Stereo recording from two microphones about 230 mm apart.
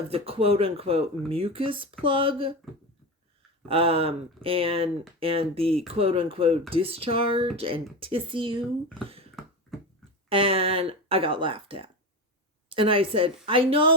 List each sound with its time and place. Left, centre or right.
0.1 s speech: right
3.7 s speech: right
9.4 s a sound: centre
10.2 s speech: right